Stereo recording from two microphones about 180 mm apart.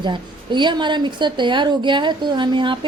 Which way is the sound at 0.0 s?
25° right (ahead or behind).